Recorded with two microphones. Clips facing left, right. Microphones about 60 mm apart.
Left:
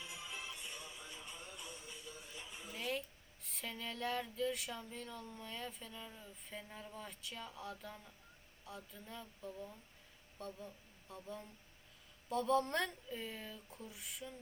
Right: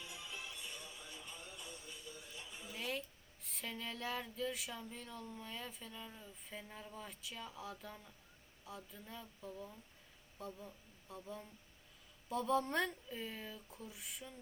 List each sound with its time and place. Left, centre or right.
0.2 s music: left
0.9 s a sound: left
1.4 s music: left
1.7 s music: left
2.6 s a sound: centre
3.4 s speech: centre